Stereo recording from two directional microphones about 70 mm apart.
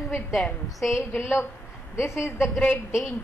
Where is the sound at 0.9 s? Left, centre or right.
Left.